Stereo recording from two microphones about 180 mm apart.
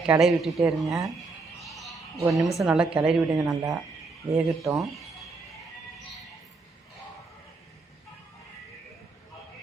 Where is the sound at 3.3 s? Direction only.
20° right (ahead or behind).